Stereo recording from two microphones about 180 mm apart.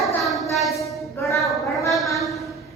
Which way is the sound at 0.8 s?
15° left (ahead or behind).